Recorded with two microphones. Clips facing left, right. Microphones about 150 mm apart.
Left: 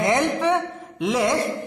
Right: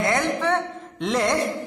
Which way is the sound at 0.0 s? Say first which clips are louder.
Left 2 dB; 15° left (ahead or behind).